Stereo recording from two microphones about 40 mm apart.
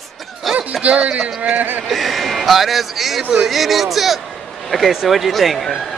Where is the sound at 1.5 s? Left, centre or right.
Right.